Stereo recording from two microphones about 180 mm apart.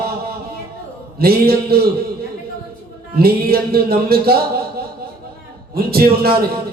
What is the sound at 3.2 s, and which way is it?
A man's voice, 60° right (ahead or behind).